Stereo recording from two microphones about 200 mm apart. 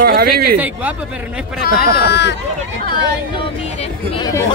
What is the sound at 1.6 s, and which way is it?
Speech, 55° left (ahead or behind).